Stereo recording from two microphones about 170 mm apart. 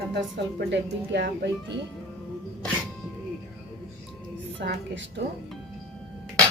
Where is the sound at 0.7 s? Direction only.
90° right.